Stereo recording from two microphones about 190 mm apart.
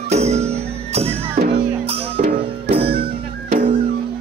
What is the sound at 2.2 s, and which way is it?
Music, 45° right (ahead or behind).